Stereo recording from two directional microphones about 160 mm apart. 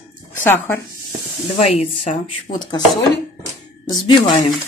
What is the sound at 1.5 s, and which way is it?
Speech, 40° left (ahead or behind).